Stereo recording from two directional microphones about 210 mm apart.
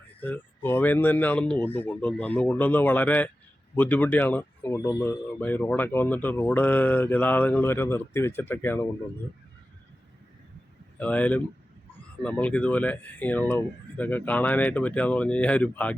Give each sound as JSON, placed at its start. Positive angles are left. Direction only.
{"t": 0.2, "sound": "speech", "side_deg": 10}
{"t": 11.0, "sound": "speech", "side_deg": 5}